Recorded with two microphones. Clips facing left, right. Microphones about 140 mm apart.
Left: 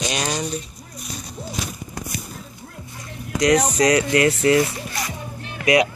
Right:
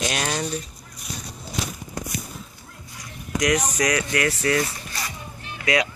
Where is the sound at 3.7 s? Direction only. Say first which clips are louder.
Left 6 dB; 25° left (ahead or behind).